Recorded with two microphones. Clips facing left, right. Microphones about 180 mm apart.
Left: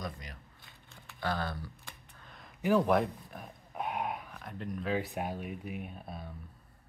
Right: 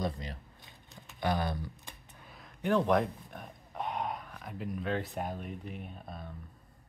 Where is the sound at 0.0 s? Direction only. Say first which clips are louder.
Right 6 dB; 30° right (ahead or behind).